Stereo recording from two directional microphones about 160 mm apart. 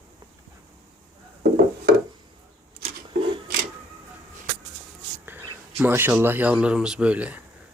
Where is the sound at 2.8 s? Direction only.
35° right (ahead or behind).